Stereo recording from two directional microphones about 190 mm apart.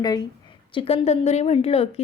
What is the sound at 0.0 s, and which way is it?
A woman's voice, 20° left (ahead or behind).